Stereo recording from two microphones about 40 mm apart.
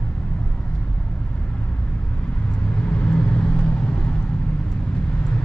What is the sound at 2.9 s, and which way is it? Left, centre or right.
Vehicle, left.